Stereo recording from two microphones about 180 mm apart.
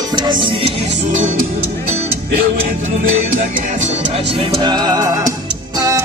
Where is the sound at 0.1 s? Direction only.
25° right (ahead or behind).